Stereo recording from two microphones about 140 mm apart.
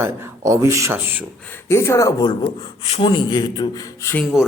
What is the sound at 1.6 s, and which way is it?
Speech, 20° left (ahead or behind).